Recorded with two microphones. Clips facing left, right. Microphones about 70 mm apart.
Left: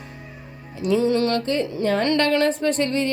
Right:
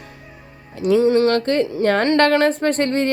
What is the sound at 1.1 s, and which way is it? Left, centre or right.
Speech, right.